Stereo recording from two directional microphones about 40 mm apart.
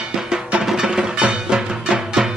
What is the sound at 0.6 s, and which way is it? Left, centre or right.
Music, centre.